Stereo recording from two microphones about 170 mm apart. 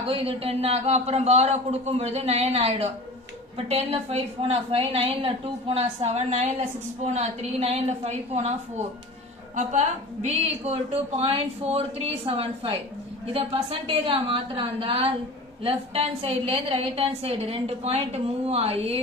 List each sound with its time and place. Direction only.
0.1 s a woman's voice: 35° right (ahead or behind)
10.2 s a woman's voice: 35° right (ahead or behind)